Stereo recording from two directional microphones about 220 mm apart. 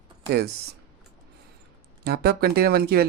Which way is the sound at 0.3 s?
50° right (ahead or behind).